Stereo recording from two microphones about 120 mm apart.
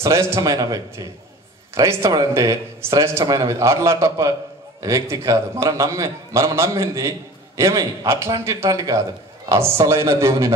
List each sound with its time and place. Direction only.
0.0 s a man's voice: 25° right (ahead or behind)